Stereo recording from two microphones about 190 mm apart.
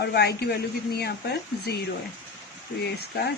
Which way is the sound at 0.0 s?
60° left (ahead or behind).